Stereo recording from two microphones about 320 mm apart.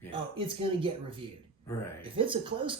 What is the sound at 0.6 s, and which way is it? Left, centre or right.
Speech, centre.